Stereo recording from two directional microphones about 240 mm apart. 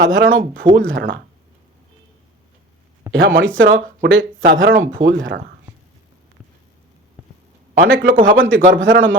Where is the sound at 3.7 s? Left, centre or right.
Right.